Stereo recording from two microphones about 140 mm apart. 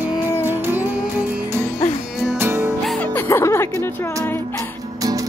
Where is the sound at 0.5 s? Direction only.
15° right (ahead or behind).